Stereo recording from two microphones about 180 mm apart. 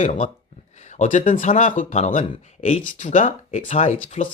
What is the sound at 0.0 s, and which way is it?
Speech, 40° left (ahead or behind).